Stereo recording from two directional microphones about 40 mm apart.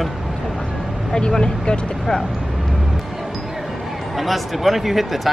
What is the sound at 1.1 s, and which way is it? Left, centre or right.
Speech, centre.